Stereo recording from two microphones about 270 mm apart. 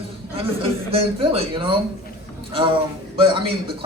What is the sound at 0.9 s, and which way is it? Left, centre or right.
Speech, centre.